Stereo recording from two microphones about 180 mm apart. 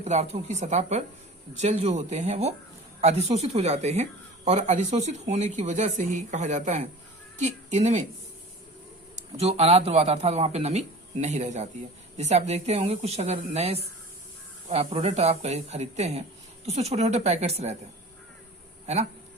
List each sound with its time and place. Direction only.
0.0 s speech: 40° right (ahead or behind)
9.1 s speech: 35° right (ahead or behind)